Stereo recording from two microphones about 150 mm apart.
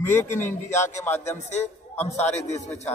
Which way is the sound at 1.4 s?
50° left (ahead or behind).